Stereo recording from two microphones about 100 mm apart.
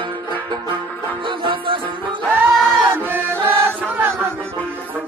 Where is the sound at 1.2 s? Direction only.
55° right (ahead or behind).